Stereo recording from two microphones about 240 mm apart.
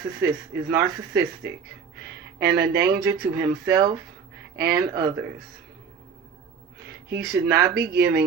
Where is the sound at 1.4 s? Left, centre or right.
Centre.